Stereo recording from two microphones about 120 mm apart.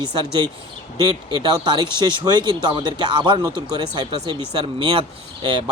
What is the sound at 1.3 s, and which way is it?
Speech, 40° right (ahead or behind).